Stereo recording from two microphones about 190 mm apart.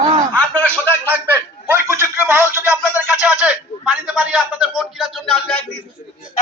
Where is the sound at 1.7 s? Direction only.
15° right (ahead or behind).